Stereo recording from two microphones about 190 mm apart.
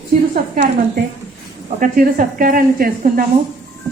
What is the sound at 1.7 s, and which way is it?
A woman's voice, 45° right (ahead or behind).